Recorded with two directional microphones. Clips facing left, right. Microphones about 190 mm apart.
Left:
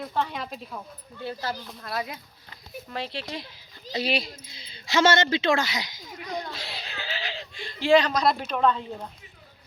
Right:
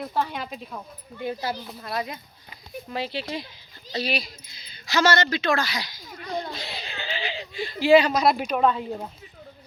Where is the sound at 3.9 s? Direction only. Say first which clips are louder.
Left 1 dB; 25° left (ahead or behind).